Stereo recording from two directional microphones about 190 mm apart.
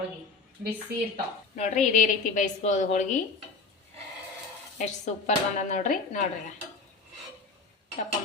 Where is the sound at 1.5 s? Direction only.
40° left (ahead or behind).